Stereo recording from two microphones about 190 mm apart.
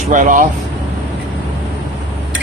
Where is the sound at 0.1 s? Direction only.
40° right (ahead or behind).